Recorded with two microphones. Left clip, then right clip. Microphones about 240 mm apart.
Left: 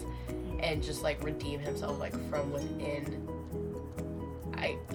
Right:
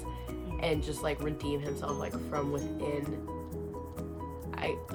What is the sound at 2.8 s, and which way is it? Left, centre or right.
Speech, centre.